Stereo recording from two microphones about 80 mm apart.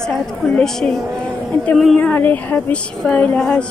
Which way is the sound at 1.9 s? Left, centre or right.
Left.